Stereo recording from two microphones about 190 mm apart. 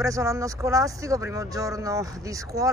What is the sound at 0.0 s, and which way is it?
Speech, 15° right (ahead or behind).